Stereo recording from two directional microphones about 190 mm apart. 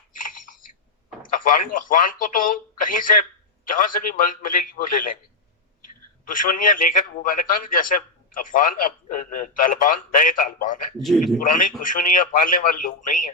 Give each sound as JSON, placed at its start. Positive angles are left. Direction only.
{"t": 0.1, "sound": "a sound", "side_deg": 45}
{"t": 1.2, "sound": "a man's voice", "side_deg": 45}
{"t": 6.2, "sound": "a man's voice", "side_deg": 45}